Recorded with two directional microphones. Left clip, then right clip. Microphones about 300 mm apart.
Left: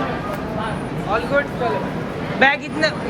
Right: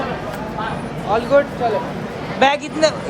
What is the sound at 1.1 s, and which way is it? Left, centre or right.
Speech, right.